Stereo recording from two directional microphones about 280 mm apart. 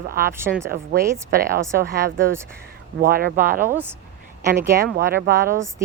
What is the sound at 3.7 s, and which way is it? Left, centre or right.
Speech, centre.